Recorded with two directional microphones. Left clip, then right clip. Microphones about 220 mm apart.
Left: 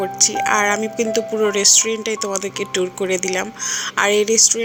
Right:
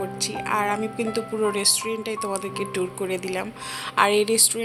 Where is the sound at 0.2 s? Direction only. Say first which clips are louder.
Left 8 dB; 20° left (ahead or behind).